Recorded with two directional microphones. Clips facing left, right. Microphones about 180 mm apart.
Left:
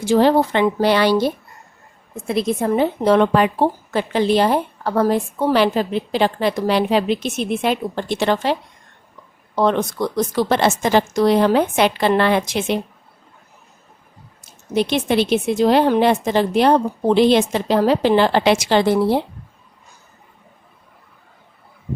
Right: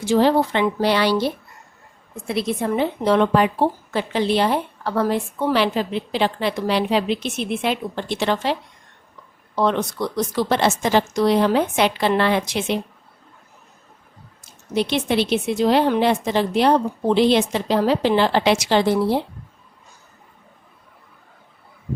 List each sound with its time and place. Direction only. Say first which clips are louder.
0.0 s a woman's voice: left 2 dB; 50° left (ahead or behind)
9.6 s a woman's voice: left 3 dB; 45° left (ahead or behind)
14.8 s a woman's voice: left 2 dB; 50° left (ahead or behind)